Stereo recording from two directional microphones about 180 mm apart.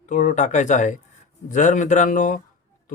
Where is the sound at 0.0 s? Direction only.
45° left (ahead or behind).